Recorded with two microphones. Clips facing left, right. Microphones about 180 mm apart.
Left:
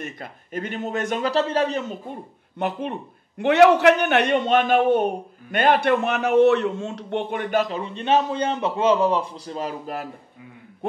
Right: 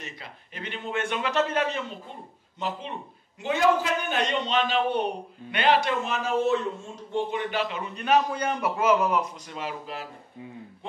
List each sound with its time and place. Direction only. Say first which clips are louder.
0.0 s a man's voice: left 7 dB; 45° left (ahead or behind)
2.6 s a man's voice: left 6 dB; 55° left (ahead or behind)